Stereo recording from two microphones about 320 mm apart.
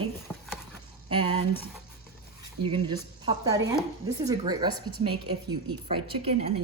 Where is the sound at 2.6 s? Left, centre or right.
Centre.